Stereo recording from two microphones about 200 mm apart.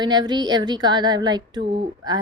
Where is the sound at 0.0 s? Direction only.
20° right (ahead or behind).